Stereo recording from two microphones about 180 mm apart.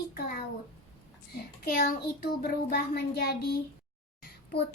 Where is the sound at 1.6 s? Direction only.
55° left (ahead or behind).